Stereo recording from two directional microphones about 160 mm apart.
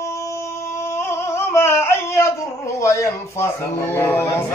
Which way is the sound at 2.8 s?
20° left (ahead or behind).